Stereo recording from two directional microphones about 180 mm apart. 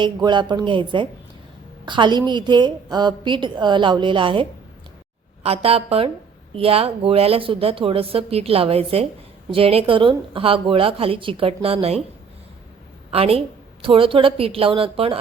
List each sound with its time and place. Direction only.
0.0 s a woman's voice: 25° right (ahead or behind)
13.1 s a woman's voice: 35° right (ahead or behind)